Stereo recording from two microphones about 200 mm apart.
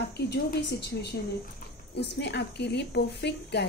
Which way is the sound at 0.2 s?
60° left (ahead or behind).